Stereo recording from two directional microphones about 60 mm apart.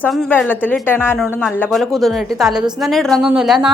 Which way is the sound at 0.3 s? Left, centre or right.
Left.